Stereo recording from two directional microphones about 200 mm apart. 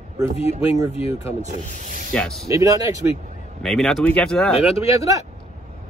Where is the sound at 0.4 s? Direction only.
30° left (ahead or behind).